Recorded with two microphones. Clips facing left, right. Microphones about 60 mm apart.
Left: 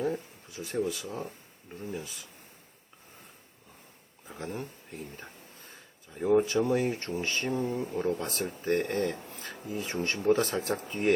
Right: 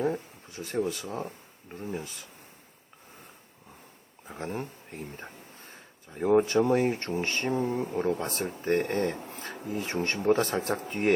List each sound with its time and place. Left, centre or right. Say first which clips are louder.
0.0 s speech: right 2 dB; right
1.7 s speech: right 2 dB; right
4.4 s speech: right 3 dB; right
7.4 s speech: right 2 dB; right